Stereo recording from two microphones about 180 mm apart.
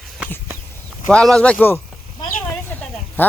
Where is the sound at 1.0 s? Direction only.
5° left (ahead or behind).